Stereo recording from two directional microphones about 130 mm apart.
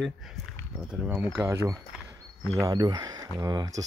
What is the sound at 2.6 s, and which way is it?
Speech, 30° right (ahead or behind).